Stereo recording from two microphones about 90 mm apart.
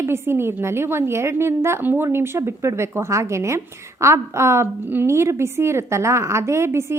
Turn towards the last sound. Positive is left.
turn(degrees=-30)  # may be behind; listen again after turning